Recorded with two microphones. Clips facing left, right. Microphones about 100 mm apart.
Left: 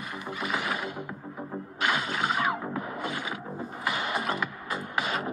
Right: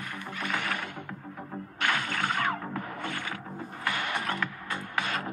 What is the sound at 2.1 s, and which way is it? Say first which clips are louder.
Music: left 2 dB; 10° left (ahead or behind).